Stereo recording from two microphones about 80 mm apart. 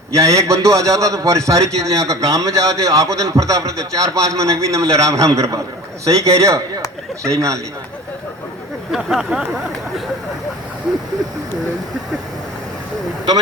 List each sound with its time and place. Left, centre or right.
0.1 s a man's voice: right
8.9 s speech: centre